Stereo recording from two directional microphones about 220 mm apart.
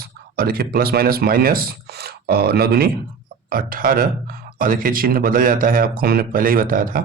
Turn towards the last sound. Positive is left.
turn(degrees=-40)  # may be behind; listen again after turning